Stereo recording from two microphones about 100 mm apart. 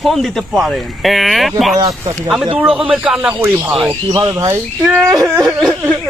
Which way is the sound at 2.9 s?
10° right (ahead or behind).